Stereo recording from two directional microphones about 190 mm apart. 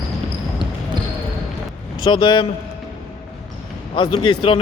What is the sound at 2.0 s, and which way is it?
Speech, 25° left (ahead or behind).